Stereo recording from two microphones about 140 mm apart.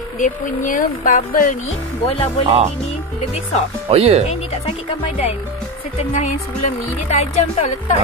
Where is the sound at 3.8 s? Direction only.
45° right (ahead or behind).